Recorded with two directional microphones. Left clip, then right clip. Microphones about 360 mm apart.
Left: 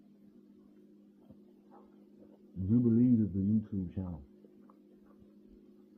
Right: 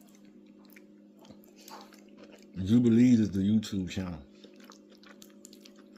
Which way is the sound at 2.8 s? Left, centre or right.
Right.